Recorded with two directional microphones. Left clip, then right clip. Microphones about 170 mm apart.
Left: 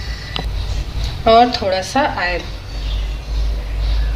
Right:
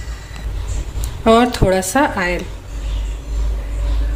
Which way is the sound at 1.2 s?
90° right.